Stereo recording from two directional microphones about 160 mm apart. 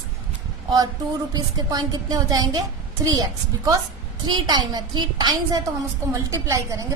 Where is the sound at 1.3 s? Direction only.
25° right (ahead or behind).